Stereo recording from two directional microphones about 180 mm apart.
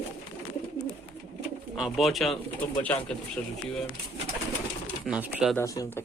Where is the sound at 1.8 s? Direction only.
Centre (ahead or behind).